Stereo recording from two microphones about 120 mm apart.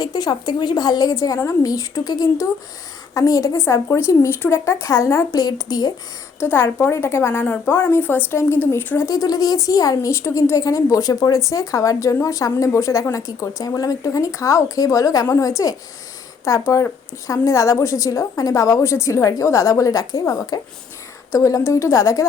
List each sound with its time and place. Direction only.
0.0 s a woman's voice: 35° left (ahead or behind)
6.4 s a woman's voice: 15° left (ahead or behind)
9.0 s a woman's voice: 30° left (ahead or behind)